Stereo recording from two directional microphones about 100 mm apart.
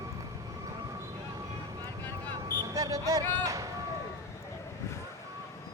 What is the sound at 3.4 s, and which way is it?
Vehicle, 35° right (ahead or behind).